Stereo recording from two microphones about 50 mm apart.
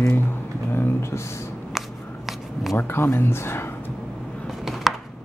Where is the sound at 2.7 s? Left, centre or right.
Left.